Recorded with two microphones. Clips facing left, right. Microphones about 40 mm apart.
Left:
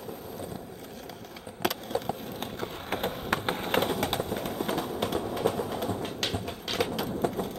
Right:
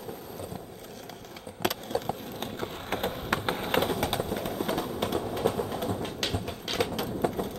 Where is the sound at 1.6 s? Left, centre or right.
Centre.